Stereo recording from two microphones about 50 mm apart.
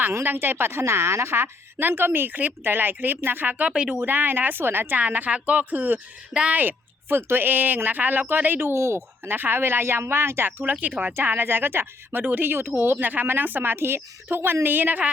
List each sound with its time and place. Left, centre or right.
0.3 s a woman's voice: right
1.8 s speech: right
3.5 s speech: right
4.0 s speech: right
4.9 s speech: right
8.7 s a woman's voice: right
10.6 s speech: right
12.2 s speech: right